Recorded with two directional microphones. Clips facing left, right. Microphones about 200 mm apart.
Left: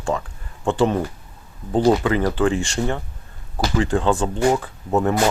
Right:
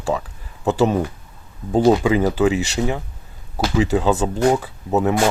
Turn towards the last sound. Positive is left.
turn(degrees=0)  # may be behind; listen again after turning